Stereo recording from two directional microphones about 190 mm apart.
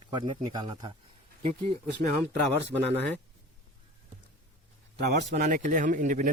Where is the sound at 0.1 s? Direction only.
25° right (ahead or behind).